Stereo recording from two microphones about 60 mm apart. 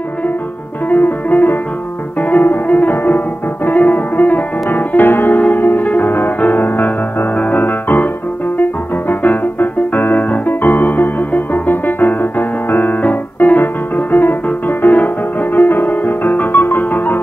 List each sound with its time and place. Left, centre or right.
0.8 s music: left
8.5 s keyboard: left
10.3 s music: left